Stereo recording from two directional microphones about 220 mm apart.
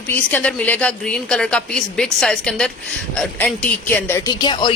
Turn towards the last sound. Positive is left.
turn(degrees=20)  # may be behind; listen again after turning